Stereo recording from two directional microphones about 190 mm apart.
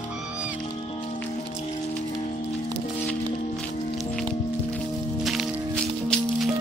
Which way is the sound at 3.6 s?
5° left (ahead or behind).